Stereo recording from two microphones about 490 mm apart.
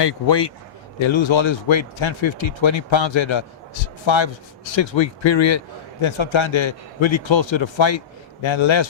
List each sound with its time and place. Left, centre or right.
0.0 s speech: left
0.9 s a man's voice: left